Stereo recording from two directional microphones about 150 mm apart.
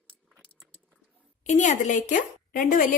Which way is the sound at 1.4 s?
50° left (ahead or behind).